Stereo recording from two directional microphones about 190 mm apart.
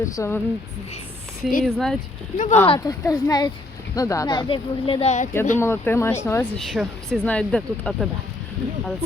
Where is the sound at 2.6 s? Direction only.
25° left (ahead or behind).